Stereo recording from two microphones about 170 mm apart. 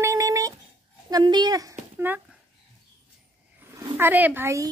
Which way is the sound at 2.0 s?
10° right (ahead or behind).